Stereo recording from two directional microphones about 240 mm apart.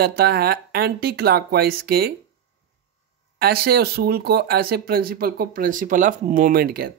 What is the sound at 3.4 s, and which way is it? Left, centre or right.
Speech, right.